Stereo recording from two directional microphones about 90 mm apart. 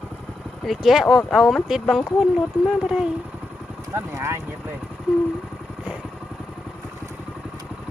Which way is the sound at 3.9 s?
30° right (ahead or behind).